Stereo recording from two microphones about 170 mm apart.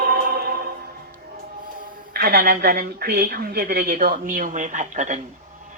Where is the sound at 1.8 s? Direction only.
65° right (ahead or behind).